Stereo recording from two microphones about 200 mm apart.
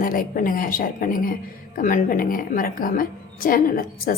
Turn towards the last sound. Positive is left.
turn(degrees=45)  # may be behind; listen again after turning